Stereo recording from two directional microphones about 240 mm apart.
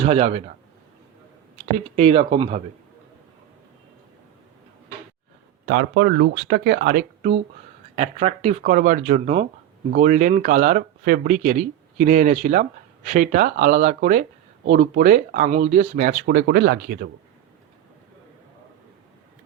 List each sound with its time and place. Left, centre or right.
0.0 s speech: right
2.0 s speech: right
5.6 s speech: right